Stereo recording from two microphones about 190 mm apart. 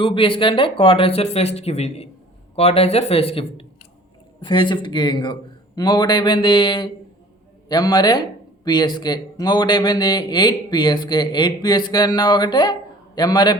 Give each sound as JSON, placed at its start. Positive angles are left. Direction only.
{"t": 0.0, "sound": "a man's voice", "side_deg": 25}